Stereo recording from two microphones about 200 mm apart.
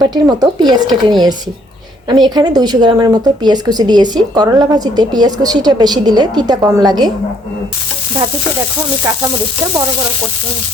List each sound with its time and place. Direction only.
0.0 s speech: 20° right (ahead or behind)
9.1 s sizzle: 15° right (ahead or behind)